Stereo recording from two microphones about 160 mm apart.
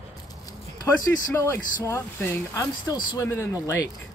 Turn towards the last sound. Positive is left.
turn(degrees=15)  # may be behind; listen again after turning